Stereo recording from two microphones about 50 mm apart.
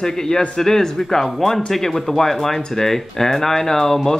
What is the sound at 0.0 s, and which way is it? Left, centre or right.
Speech, centre.